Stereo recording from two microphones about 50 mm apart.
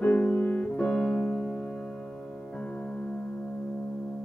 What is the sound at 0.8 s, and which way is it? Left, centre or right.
Keyboard, centre.